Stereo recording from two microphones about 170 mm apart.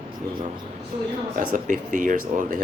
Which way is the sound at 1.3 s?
50° right (ahead or behind).